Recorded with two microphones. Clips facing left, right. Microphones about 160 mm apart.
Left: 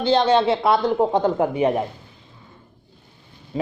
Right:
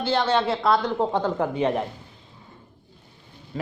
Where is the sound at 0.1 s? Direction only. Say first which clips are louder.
Left 6 dB; 20° left (ahead or behind).